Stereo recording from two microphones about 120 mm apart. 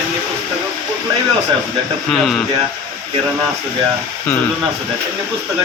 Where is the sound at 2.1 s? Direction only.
5° left (ahead or behind).